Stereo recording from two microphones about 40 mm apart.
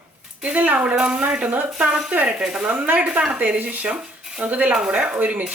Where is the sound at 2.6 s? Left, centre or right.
Right.